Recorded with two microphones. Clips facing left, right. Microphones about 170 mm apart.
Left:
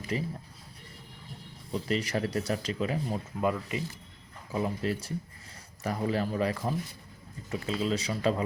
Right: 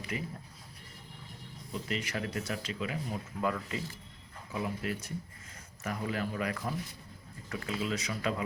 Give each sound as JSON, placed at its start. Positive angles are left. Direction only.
{"t": 0.1, "sound": "speech", "side_deg": 30}
{"t": 1.7, "sound": "speech", "side_deg": 35}
{"t": 3.4, "sound": "speech", "side_deg": 20}
{"t": 4.5, "sound": "speech", "side_deg": 30}